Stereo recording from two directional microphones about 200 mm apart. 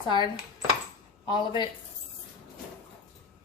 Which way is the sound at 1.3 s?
20° left (ahead or behind).